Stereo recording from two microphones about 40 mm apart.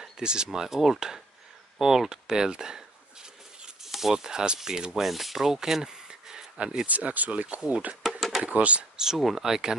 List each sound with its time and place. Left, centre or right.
0.2 s speech: right
3.8 s a sound: centre
4.1 s speech: centre
5.0 s speech: centre; by 6.9 s right
6.9 s speech: right
8.0 s a sound: centre
8.5 s speech: right
8.9 s speech: centre